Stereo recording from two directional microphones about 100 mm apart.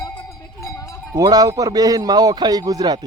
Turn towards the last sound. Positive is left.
turn(degrees=-40)  # may be behind; listen again after turning